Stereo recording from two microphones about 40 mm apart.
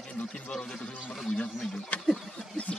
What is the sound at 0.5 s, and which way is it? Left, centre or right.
Speech, centre.